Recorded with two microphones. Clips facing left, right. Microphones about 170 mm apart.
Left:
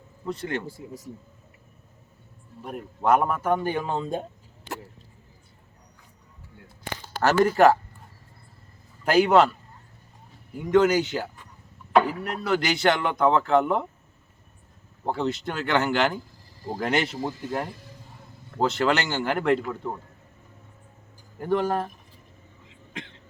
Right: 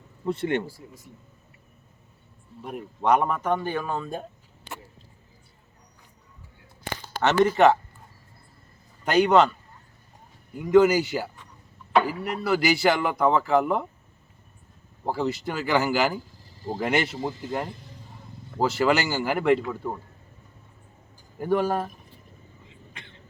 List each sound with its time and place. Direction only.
0.3 s speech: 25° right (ahead or behind)
2.6 s a man's voice: centre (ahead or behind); by 4.3 s 20° left (ahead or behind)
7.4 s speech: centre (ahead or behind)
9.0 s speech: 5° left (ahead or behind)
10.5 s speech: centre (ahead or behind)
15.0 s speech: 5° right (ahead or behind)
21.4 s speech: 10° right (ahead or behind)
22.9 s a sound: 90° left